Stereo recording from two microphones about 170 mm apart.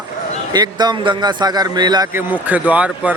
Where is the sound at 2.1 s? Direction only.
15° right (ahead or behind).